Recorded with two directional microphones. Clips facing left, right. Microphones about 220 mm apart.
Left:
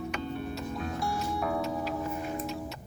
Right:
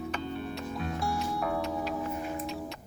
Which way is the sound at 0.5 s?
Centre (ahead or behind).